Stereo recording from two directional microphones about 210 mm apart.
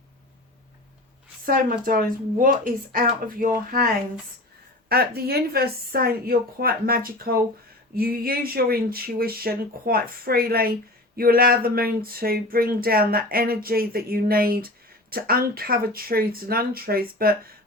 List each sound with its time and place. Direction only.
1.5 s speech: 45° right (ahead or behind)
4.9 s speech: 50° right (ahead or behind)